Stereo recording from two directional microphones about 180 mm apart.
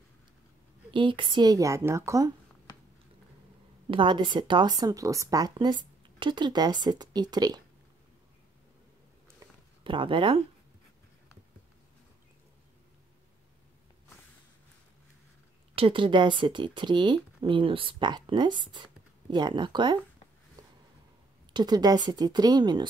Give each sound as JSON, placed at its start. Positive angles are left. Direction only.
{"t": 0.9, "sound": "a woman's voice", "side_deg": -25}
{"t": 3.9, "sound": "a woman's voice", "side_deg": -25}
{"t": 9.8, "sound": "a woman's voice", "side_deg": -30}
{"t": 15.7, "sound": "a woman's voice", "side_deg": -30}
{"t": 21.5, "sound": "a woman's voice", "side_deg": -20}